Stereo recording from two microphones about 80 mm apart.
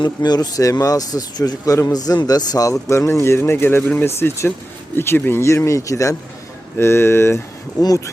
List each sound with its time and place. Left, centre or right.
0.0 s speech: left
2.9 s speech: left
6.7 s speech: left
7.8 s speech: left